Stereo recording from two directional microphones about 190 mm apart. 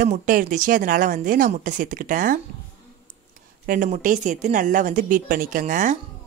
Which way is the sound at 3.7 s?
45° right (ahead or behind).